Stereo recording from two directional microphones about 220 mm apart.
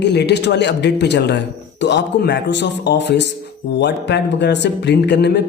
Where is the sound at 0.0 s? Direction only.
50° left (ahead or behind).